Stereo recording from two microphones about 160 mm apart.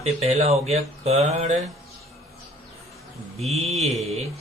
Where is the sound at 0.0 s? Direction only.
40° right (ahead or behind).